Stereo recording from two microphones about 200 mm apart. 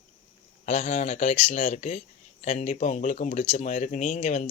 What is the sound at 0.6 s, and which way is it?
Speech, 35° left (ahead or behind).